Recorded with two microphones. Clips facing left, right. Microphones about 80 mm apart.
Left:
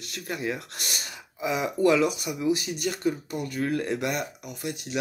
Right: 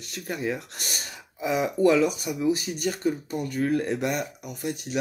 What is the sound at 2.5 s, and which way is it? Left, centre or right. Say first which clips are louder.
Speech: even; right.